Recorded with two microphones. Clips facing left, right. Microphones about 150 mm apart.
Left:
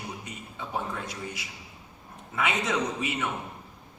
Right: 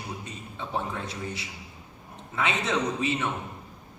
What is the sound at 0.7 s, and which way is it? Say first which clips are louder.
A man's voice: right 1 dB; 30° right (ahead or behind).